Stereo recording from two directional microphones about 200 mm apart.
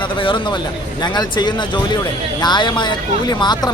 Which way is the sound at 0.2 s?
25° left (ahead or behind).